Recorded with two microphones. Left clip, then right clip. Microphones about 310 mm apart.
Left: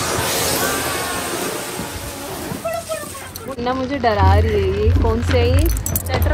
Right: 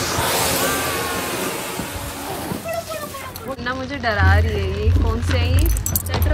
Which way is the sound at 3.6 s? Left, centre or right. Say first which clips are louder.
Left 7 dB; centre.